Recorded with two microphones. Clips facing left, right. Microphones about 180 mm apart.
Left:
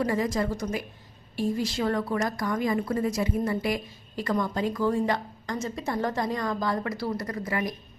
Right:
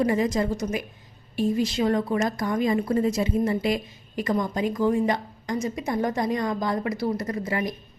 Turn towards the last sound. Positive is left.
turn(degrees=-25)  # may be behind; listen again after turning